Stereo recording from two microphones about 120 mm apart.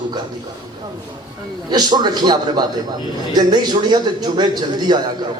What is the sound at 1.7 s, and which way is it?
A man's voice, 35° right (ahead or behind).